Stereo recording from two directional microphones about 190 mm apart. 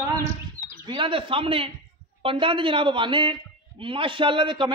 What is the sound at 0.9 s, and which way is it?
A man's voice, 25° right (ahead or behind).